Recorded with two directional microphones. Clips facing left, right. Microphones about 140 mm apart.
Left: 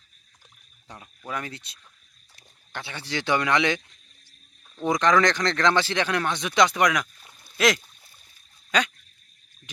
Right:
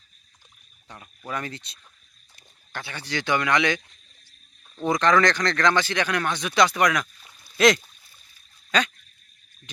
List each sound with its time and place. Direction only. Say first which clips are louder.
1.3 s speech: right 1 dB; 10° left (ahead or behind)
2.7 s speech: right 1 dB; 25° left (ahead or behind)
4.9 s speech: right 1 dB; 15° left (ahead or behind)
8.7 s speech: right 1 dB; 15° left (ahead or behind)